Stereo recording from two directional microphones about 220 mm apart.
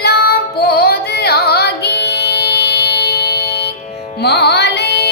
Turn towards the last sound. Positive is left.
turn(degrees=50)  # may be behind; listen again after turning